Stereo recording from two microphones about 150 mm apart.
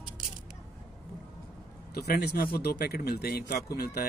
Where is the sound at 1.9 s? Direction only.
90° left.